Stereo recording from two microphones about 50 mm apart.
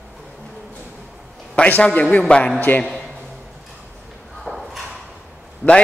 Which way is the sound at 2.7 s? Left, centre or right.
Left.